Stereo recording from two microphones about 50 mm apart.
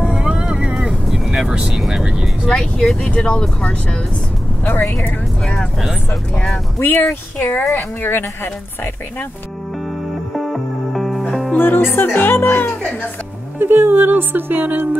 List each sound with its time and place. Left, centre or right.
0.1 s vehicle: centre
1.7 s speech: centre
2.5 s speech: centre
6.3 s speech: centre
6.8 s speech: left
7.7 s speech: left
10.3 s music: centre
11.5 s speech: left
13.6 s speech: right